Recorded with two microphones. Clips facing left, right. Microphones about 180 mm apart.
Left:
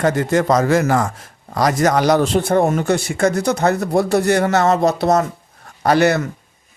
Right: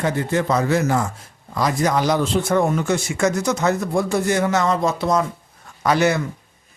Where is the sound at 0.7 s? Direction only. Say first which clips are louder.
Left 3 dB; 55° left (ahead or behind).